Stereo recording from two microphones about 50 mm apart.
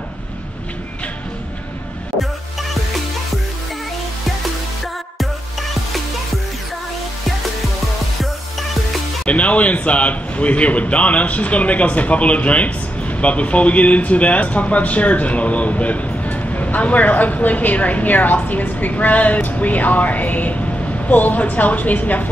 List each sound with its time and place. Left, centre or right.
9.2 s a man's voice: left